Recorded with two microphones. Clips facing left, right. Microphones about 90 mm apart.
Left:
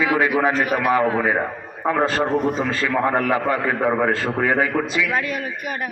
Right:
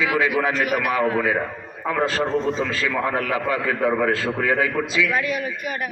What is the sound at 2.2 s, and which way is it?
Speech, 15° left (ahead or behind).